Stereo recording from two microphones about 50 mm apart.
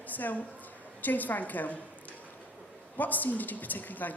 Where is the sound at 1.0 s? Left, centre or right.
Left.